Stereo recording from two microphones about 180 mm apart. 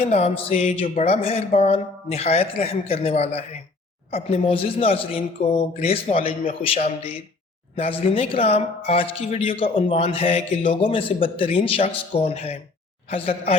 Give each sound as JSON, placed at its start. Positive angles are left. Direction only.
{"t": 0.0, "sound": "speech", "side_deg": 35}